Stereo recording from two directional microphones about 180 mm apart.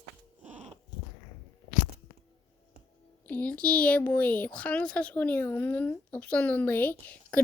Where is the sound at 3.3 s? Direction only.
5° left (ahead or behind).